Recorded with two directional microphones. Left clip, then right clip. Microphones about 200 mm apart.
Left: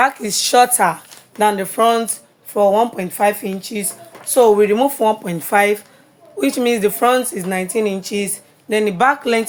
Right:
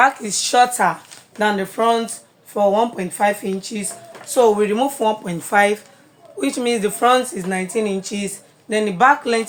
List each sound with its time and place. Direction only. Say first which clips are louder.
0.0 s a woman's voice: even; 40° left (ahead or behind)